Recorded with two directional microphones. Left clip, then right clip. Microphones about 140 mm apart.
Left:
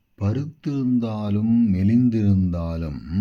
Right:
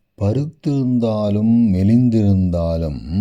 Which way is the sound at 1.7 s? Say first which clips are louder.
Right 4 dB; 45° right (ahead or behind).